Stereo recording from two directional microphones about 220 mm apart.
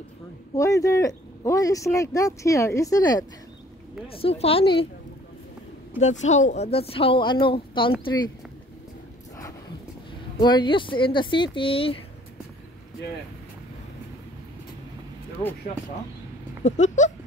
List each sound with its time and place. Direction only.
0.6 s speech: 15° left (ahead or behind)
5.9 s speech: 30° left (ahead or behind)
10.4 s speech: 20° left (ahead or behind)
16.6 s a sound: 35° left (ahead or behind)